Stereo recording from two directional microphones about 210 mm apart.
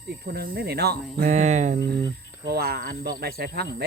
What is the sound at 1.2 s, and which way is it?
Speech, 35° right (ahead or behind).